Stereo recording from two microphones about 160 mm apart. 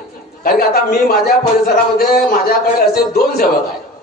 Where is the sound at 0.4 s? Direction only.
75° left (ahead or behind).